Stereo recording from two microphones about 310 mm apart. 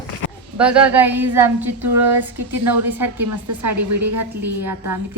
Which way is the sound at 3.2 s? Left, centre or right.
Right.